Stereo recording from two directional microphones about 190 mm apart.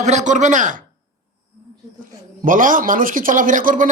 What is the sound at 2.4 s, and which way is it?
Speech, 45° right (ahead or behind).